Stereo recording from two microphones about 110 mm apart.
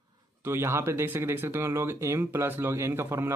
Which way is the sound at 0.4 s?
20° right (ahead or behind).